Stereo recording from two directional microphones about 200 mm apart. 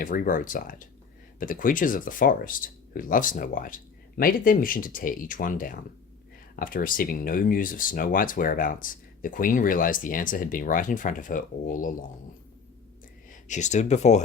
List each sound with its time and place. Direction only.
0.0 s speech: 45° left (ahead or behind)
13.3 s speech: 35° left (ahead or behind)